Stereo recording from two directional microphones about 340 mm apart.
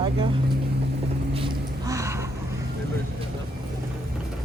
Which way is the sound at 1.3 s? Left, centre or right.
Centre.